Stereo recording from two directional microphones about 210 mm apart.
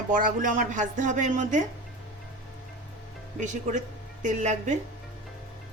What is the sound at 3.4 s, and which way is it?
A woman's voice, 35° right (ahead or behind).